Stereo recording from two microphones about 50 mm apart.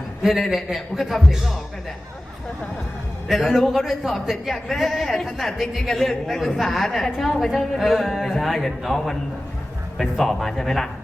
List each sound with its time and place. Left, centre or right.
0.3 s a woman's voice: centre
3.3 s a woman's voice: centre